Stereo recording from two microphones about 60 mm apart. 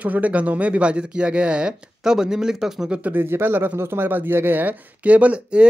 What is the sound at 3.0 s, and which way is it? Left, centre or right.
Speech, right.